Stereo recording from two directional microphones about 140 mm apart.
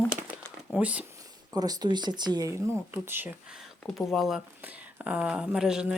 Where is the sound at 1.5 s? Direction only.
25° right (ahead or behind).